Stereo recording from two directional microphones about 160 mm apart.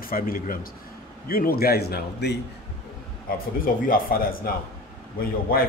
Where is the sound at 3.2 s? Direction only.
60° left (ahead or behind).